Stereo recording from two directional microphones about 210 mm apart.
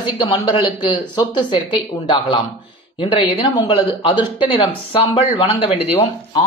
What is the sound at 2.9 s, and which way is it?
Speech, 25° left (ahead or behind).